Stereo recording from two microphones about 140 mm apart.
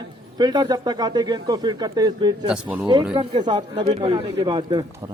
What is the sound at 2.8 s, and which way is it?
Speech, 30° right (ahead or behind).